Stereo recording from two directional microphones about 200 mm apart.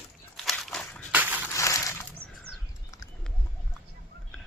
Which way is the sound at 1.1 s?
10° right (ahead or behind).